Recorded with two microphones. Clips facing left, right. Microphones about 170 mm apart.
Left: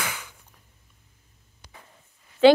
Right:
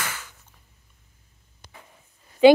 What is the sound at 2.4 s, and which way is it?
Speech, 15° right (ahead or behind).